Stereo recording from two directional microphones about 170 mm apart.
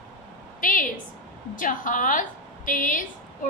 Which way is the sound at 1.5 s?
50° left (ahead or behind).